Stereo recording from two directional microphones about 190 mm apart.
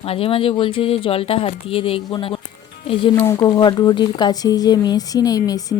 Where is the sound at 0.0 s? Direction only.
30° left (ahead or behind).